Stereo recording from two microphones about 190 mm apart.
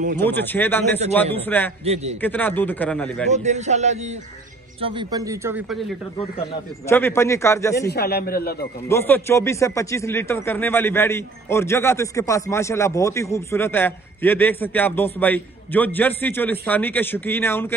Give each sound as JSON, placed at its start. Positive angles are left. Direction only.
{"t": 0.2, "sound": "speech", "side_deg": 10}
{"t": 3.3, "sound": "a man's voice", "side_deg": -40}
{"t": 4.8, "sound": "a man's voice", "side_deg": -20}
{"t": 5.7, "sound": "speech", "side_deg": 0}
{"t": 6.9, "sound": "speech", "side_deg": 10}
{"t": 7.9, "sound": "a man's voice", "side_deg": 55}
{"t": 8.8, "sound": "speech", "side_deg": 10}